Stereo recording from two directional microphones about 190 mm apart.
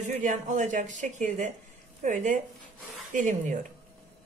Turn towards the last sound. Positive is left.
turn(degrees=-40)  # may be behind; listen again after turning